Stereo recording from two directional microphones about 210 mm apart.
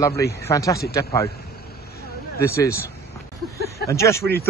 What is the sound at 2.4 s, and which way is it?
Speech, 10° left (ahead or behind).